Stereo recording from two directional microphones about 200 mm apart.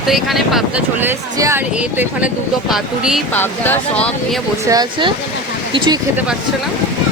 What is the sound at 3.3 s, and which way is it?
Speech, 10° left (ahead or behind).